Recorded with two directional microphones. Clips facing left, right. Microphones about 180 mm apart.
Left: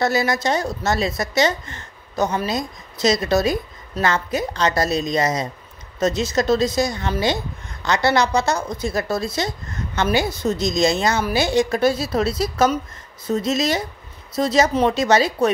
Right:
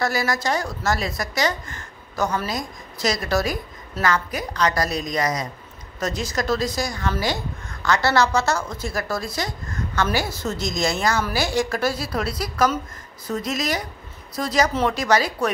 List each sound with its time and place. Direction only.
0.0 s a woman's voice: 20° left (ahead or behind)